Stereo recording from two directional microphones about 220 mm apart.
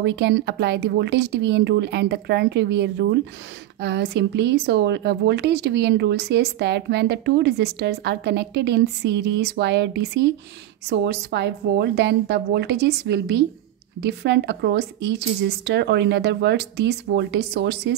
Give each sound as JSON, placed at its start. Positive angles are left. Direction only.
{"t": 0.0, "sound": "speech", "side_deg": -50}